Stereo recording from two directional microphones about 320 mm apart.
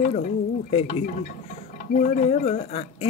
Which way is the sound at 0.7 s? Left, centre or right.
Centre.